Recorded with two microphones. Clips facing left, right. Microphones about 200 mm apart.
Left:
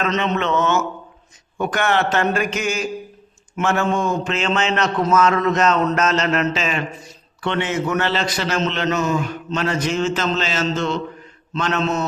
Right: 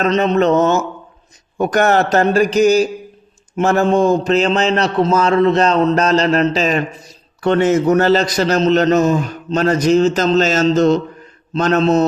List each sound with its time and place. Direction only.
0.0 s a man's voice: 35° right (ahead or behind)